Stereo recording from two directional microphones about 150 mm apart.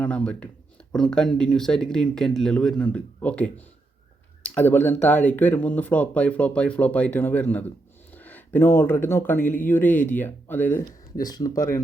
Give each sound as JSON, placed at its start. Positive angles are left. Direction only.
{"t": 0.0, "sound": "speech", "side_deg": 10}
{"t": 11.2, "sound": "speech", "side_deg": 25}